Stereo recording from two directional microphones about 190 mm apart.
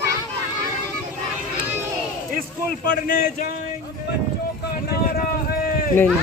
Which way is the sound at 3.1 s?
45° left (ahead or behind).